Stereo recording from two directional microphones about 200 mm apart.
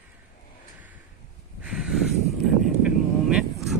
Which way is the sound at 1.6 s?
5° right (ahead or behind).